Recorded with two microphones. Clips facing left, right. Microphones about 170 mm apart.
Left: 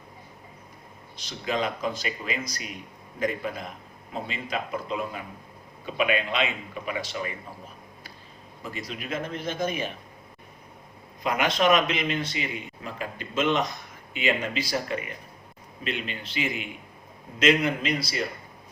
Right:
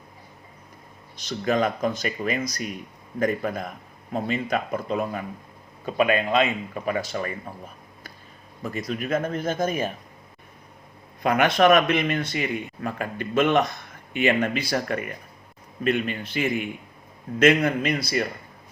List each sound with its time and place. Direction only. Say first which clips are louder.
1.1 s speech: right 6 dB; 45° right (ahead or behind)
8.9 s speech: right 7 dB; 45° right (ahead or behind)
11.2 s speech: right 5 dB; 55° right (ahead or behind)